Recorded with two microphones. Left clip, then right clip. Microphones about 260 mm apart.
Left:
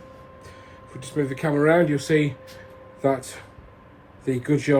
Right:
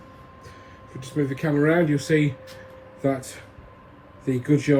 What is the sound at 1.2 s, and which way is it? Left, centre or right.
Speech, centre.